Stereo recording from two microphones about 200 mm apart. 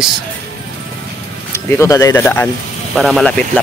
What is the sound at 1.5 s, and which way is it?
Speech, 15° left (ahead or behind).